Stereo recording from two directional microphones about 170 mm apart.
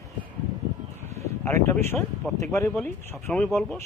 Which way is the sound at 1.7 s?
15° left (ahead or behind).